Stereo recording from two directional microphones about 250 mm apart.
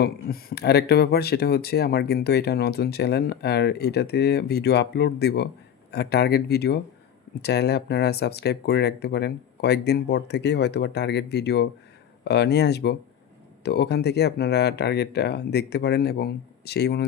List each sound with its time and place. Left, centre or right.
0.0 s speech: left